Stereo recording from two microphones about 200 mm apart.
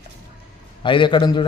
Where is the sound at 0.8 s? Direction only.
25° left (ahead or behind).